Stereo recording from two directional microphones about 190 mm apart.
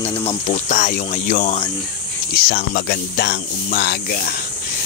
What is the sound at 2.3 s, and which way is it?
Speech, 55° left (ahead or behind).